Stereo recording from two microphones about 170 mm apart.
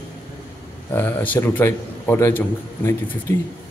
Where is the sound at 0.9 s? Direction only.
10° left (ahead or behind).